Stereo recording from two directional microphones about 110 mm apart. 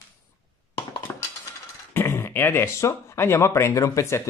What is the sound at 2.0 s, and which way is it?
Speech, 25° left (ahead or behind).